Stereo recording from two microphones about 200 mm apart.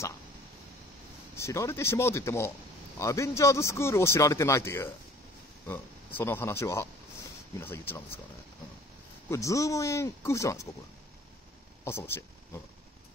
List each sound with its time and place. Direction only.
1.3 s a man's voice: 15° left (ahead or behind)
9.3 s a man's voice: 15° left (ahead or behind)
11.8 s a man's voice: 10° left (ahead or behind)